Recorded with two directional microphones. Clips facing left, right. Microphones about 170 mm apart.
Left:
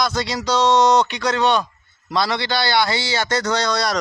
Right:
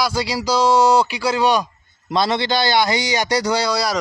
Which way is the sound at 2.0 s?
20° right (ahead or behind).